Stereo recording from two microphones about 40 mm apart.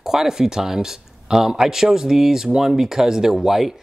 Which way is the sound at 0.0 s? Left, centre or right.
Centre.